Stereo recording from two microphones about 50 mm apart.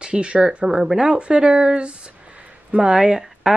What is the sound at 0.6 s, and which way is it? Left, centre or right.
Speech, centre.